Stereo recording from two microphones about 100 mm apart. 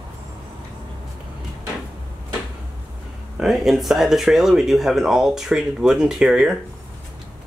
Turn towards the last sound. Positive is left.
turn(degrees=-5)  # may be behind; listen again after turning